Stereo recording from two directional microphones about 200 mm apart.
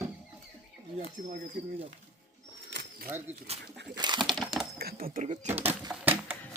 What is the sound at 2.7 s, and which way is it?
Bird, 55° right (ahead or behind).